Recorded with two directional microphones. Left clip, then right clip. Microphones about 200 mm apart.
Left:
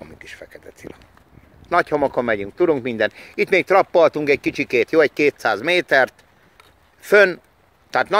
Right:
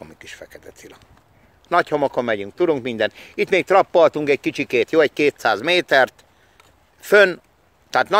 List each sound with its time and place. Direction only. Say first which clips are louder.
0.0 s speech: even; 5° right (ahead or behind)